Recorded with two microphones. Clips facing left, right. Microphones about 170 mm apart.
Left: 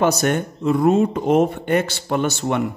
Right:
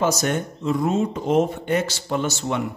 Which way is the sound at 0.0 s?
60° left (ahead or behind).